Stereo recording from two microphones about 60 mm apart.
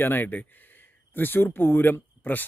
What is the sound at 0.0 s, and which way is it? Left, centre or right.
Speech, left.